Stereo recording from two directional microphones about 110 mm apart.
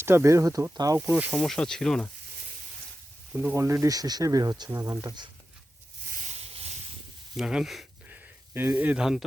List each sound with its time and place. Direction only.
0.0 s speech: 25° right (ahead or behind)
1.4 s speech: 5° left (ahead or behind)
3.3 s speech: 25° right (ahead or behind); by 5.3 s 40° right (ahead or behind)
6.2 s a sound: 75° right (ahead or behind)
7.3 s speech: 5° right (ahead or behind)
8.0 s a sound: 15° right (ahead or behind)